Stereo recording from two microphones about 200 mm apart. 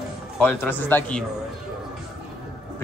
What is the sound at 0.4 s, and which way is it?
Speech, 10° left (ahead or behind).